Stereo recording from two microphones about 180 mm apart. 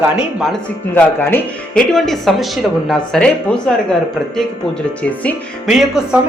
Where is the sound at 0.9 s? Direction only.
10° left (ahead or behind).